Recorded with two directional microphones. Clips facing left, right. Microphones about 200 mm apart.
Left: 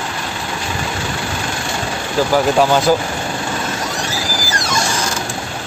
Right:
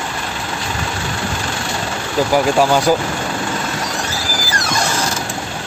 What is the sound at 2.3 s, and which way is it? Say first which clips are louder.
Speech: even; 10° right (ahead or behind).